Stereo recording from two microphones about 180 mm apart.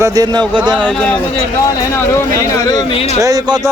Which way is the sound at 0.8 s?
5° left (ahead or behind).